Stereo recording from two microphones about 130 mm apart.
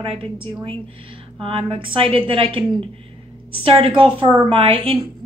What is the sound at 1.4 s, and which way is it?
A woman's voice, 40° right (ahead or behind).